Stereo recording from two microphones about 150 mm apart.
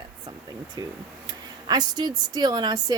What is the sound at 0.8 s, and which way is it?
Speech, 30° right (ahead or behind).